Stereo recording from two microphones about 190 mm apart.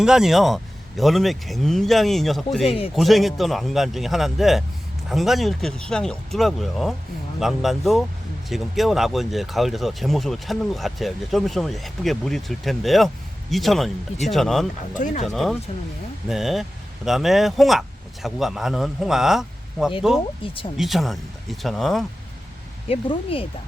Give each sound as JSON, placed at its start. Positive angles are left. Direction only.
{"t": 0.0, "sound": "speech", "side_deg": -5}
{"t": 2.6, "sound": "speech", "side_deg": 30}
{"t": 2.9, "sound": "speech", "side_deg": 0}
{"t": 14.9, "sound": "speech", "side_deg": 40}
{"t": 15.3, "sound": "speech", "side_deg": 0}
{"t": 20.4, "sound": "speech", "side_deg": 30}
{"t": 20.7, "sound": "speech", "side_deg": 0}
{"t": 22.9, "sound": "speech", "side_deg": 30}